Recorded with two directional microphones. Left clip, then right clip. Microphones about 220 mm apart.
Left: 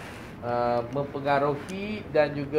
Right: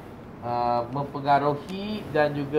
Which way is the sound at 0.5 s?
45° right (ahead or behind).